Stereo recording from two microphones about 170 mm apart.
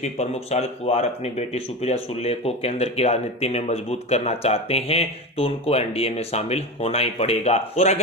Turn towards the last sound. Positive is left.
turn(degrees=40)  # may be behind; listen again after turning